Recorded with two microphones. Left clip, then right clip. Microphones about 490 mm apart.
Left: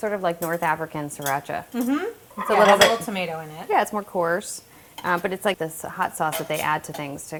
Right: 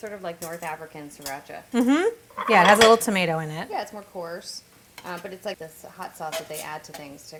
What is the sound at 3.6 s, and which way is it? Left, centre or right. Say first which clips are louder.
A woman's voice: left 10 dB; left.